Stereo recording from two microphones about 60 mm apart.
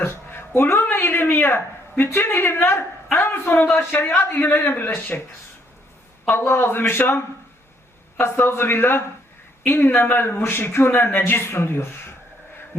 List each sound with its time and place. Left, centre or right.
0.0 s a sound: left
2.1 s a woman's voice: left
4.4 s a woman's voice: left
8.2 s a woman's voice: left